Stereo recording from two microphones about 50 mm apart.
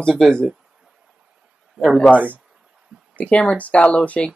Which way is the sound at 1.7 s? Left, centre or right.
Centre.